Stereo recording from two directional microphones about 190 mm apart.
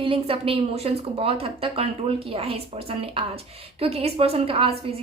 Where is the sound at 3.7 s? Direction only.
30° right (ahead or behind).